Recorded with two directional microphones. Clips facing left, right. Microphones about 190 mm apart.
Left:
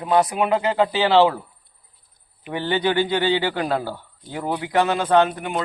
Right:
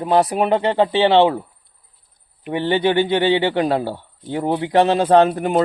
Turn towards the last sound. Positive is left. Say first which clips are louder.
# right 5 dB
turn(degrees=-35)  # may be behind; listen again after turning